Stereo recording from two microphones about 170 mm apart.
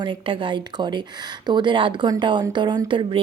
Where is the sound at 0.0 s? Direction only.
30° right (ahead or behind).